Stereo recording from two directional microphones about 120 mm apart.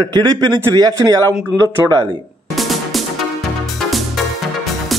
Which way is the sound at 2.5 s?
Centre (ahead or behind).